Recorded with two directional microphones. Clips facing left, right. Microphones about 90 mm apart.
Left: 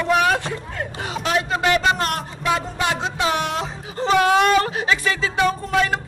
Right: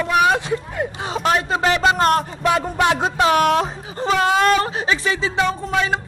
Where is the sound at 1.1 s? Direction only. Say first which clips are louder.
Right 2 dB; 30° right (ahead or behind).